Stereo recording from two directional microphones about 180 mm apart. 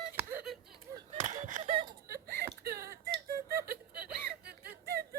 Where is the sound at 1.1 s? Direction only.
40° right (ahead or behind).